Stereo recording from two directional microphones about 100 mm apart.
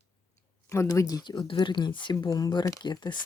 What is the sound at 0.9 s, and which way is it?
Speech, 40° left (ahead or behind).